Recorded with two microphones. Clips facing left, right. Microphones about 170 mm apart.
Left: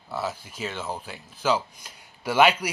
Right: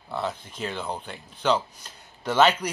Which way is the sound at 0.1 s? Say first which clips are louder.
Right 1 dB; 5° left (ahead or behind).